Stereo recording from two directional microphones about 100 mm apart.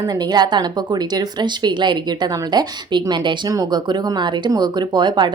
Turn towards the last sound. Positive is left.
turn(degrees=-45)  # may be behind; listen again after turning